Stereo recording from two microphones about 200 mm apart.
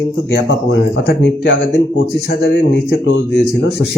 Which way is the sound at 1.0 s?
65° left (ahead or behind).